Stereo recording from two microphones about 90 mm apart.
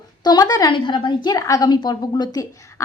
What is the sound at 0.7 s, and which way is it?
Speech, 65° left (ahead or behind).